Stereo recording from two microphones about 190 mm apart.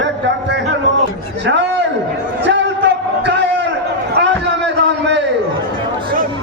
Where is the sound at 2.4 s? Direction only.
70° right (ahead or behind).